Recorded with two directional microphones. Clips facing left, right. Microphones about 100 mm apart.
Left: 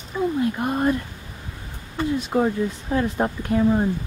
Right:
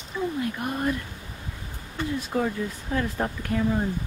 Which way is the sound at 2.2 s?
25° left (ahead or behind).